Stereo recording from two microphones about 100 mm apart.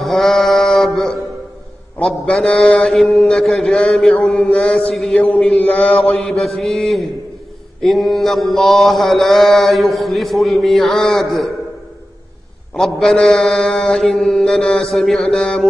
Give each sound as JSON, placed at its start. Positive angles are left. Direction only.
{"t": 0.0, "sound": "mantra", "side_deg": 0}
{"t": 5.2, "sound": "mantra", "side_deg": 15}
{"t": 6.1, "sound": "mantra", "side_deg": 0}
{"t": 12.7, "sound": "mantra", "side_deg": 5}